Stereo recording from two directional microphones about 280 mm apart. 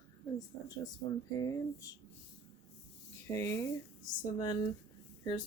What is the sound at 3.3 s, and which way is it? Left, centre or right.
Speech, centre.